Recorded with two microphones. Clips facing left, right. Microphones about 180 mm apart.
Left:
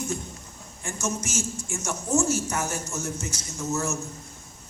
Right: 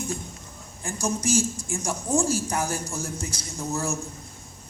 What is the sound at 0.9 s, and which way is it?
A man's voice, 35° right (ahead or behind).